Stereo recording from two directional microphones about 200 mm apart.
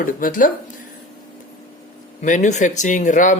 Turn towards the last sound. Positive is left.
turn(degrees=40)  # may be behind; listen again after turning